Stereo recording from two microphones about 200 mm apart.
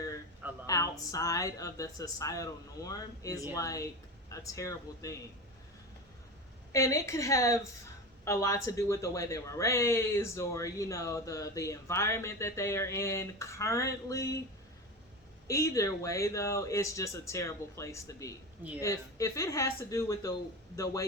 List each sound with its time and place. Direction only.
0.7 s speech: 15° left (ahead or behind)
6.7 s speech: 15° left (ahead or behind)
15.4 s speech: 15° left (ahead or behind)